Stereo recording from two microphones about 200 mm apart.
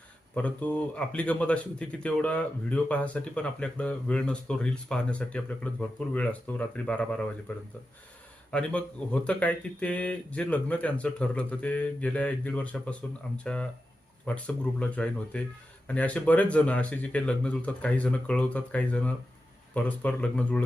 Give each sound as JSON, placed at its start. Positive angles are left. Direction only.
{"t": 0.3, "sound": "speech", "side_deg": 5}